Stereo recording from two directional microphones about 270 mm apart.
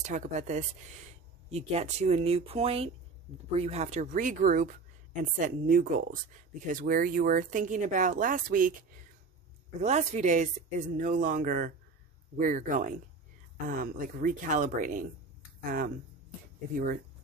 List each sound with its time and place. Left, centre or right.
0.0 s speech: right
9.8 s speech: right
16.7 s speech: right